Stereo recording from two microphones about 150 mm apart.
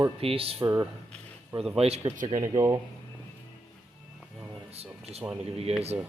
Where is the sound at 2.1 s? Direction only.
60° right (ahead or behind).